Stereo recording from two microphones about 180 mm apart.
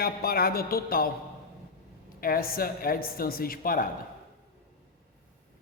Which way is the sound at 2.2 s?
55° left (ahead or behind).